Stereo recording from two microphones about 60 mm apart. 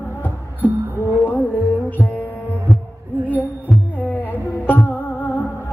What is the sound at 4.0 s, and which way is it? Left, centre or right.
Hum, left.